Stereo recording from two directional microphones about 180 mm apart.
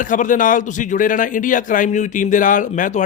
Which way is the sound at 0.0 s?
45° left (ahead or behind).